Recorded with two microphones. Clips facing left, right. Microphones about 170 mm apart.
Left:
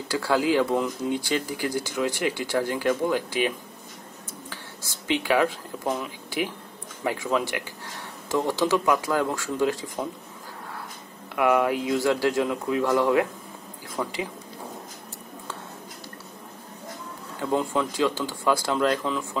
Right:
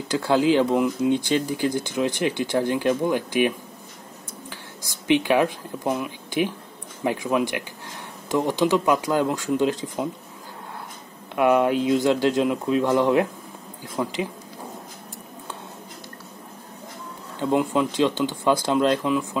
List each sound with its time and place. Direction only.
0.1 s speech: 20° right (ahead or behind)
5.0 s speech: 20° right (ahead or behind)
11.3 s speech: 20° right (ahead or behind)
14.0 s speech: 5° right (ahead or behind)
17.4 s speech: 15° right (ahead or behind)